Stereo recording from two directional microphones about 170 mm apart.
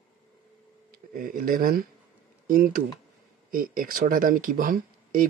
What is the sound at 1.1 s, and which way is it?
Speech, 55° right (ahead or behind).